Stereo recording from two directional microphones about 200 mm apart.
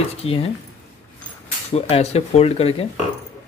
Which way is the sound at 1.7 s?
30° left (ahead or behind).